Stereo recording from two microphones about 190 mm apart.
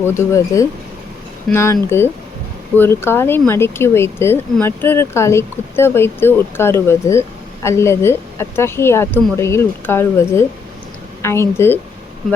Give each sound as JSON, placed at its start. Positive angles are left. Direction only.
{"t": 0.0, "sound": "speech", "side_deg": 15}